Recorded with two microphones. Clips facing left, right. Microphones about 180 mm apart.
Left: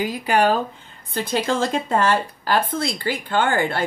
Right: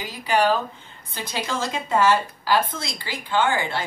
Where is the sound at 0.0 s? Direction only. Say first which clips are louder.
Left 3 dB; 50° left (ahead or behind).